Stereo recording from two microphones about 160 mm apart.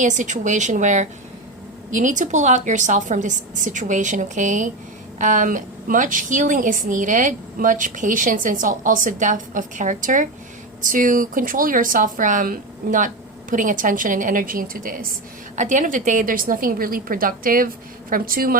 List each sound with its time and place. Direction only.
0.0 s a woman's voice: 50° right (ahead or behind)